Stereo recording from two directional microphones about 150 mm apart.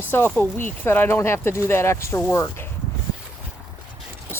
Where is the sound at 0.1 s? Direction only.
15° left (ahead or behind).